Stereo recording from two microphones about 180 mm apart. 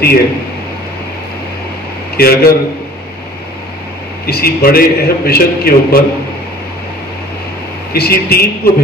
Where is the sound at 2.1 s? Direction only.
55° left (ahead or behind).